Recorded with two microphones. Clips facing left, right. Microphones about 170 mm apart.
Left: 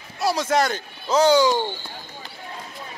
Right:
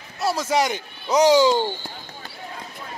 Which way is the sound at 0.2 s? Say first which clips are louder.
Left 1 dB; 5° right (ahead or behind).